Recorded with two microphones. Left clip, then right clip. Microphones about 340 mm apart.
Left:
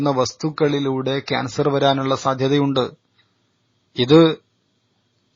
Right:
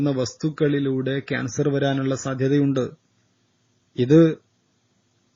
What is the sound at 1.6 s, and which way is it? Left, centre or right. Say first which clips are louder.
Speech: left 6 dB; left.